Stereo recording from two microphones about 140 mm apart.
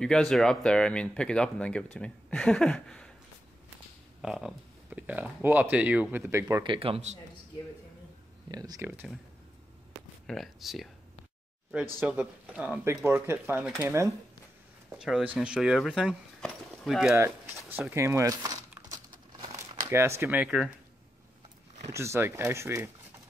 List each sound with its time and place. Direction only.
0.0 s speech: 5° left (ahead or behind)
4.2 s speech: 5° right (ahead or behind)
6.6 s speech: 40° right (ahead or behind)
8.5 s speech: 25° right (ahead or behind)
8.8 s speech: 15° right (ahead or behind)
10.2 s speech: centre (ahead or behind)
12.0 s speech: 10° right (ahead or behind)
15.0 s speech: 5° right (ahead or behind)
17.7 s speech: 15° right (ahead or behind)
21.9 s speech: 20° right (ahead or behind)